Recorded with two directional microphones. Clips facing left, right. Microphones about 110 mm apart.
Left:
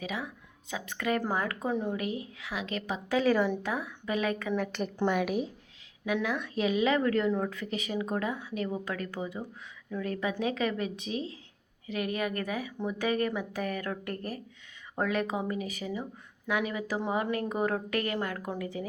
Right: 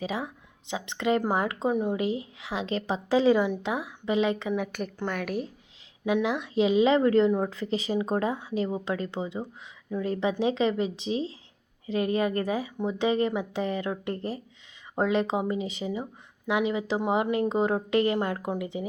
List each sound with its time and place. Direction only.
0.0 s a woman's voice: 30° right (ahead or behind)
4.5 s a woman's voice: 10° right (ahead or behind)
4.9 s a woman's voice: 10° left (ahead or behind)
6.1 s a woman's voice: 20° right (ahead or behind)